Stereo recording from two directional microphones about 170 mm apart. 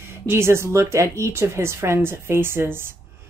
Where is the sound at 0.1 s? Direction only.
15° right (ahead or behind).